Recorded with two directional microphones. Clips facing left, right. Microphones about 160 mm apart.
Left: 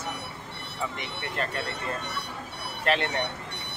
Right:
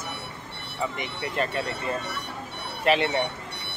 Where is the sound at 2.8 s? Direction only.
5° right (ahead or behind).